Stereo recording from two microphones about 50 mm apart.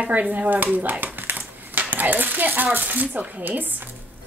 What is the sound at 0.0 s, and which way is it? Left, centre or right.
A woman's voice, right.